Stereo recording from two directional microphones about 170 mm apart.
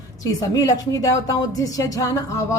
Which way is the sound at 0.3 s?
20° left (ahead or behind).